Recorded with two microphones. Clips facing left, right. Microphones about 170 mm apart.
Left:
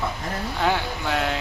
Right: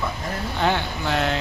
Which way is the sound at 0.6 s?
5° left (ahead or behind).